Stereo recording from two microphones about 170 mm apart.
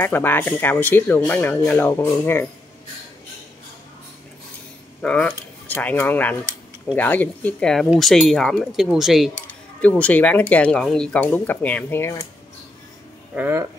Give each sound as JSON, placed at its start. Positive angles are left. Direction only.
{"t": 0.0, "sound": "speech", "side_deg": 10}
{"t": 5.0, "sound": "speech", "side_deg": 5}
{"t": 13.3, "sound": "speech", "side_deg": -10}